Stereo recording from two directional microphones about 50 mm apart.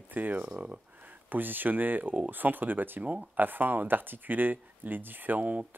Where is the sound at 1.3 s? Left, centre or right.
Right.